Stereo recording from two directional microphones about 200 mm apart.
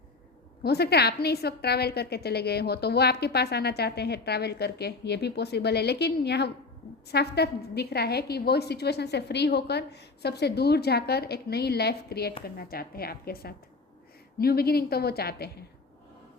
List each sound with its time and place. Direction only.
0.6 s a woman's voice: 55° left (ahead or behind)